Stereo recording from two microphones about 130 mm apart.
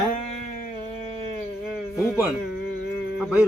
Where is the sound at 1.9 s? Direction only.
5° right (ahead or behind).